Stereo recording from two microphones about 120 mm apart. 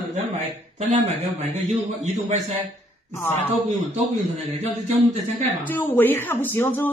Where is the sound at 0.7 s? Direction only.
70° right (ahead or behind).